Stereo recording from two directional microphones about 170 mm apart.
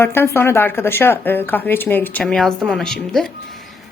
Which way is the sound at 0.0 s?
15° left (ahead or behind).